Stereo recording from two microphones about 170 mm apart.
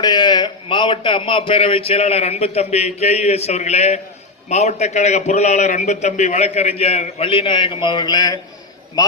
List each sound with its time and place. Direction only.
0.0 s a man's voice: 25° left (ahead or behind)